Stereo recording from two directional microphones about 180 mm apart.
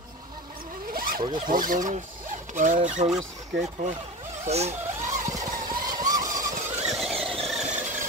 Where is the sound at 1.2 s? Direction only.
25° right (ahead or behind).